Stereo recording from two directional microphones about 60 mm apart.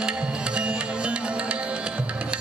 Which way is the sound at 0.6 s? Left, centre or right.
Centre.